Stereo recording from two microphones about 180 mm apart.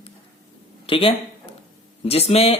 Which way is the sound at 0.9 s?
30° left (ahead or behind).